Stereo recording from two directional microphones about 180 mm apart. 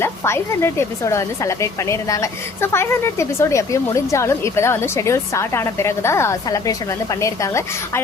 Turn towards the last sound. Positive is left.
turn(degrees=15)  # may be behind; listen again after turning